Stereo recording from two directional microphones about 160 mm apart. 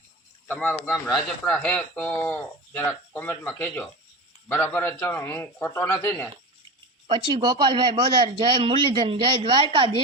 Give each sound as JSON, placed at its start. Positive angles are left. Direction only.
{"t": 0.4, "sound": "speech", "side_deg": 10}
{"t": 7.1, "sound": "a man's voice", "side_deg": -30}